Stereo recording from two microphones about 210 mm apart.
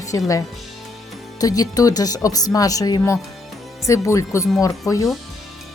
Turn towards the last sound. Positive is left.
turn(degrees=15)  # may be behind; listen again after turning